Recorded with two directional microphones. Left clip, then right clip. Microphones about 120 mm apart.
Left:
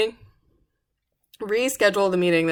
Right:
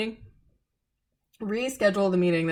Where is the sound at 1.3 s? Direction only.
35° left (ahead or behind).